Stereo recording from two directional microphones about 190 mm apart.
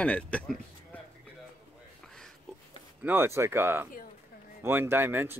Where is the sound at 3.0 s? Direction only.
10° right (ahead or behind).